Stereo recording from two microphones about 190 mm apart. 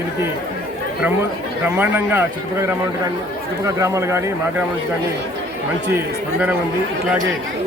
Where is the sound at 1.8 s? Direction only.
10° right (ahead or behind).